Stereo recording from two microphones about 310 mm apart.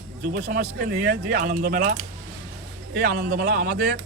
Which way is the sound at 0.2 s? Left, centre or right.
Right.